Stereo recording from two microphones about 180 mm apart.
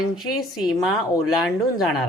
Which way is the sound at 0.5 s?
Centre (ahead or behind).